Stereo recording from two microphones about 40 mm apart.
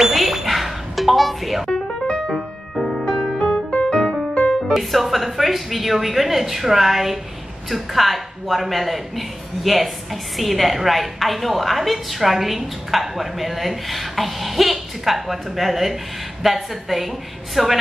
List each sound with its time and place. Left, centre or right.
0.0 s music: centre
1.7 s music: centre
2.3 s music: centre
3.9 s music: left
4.5 s a woman's voice: centre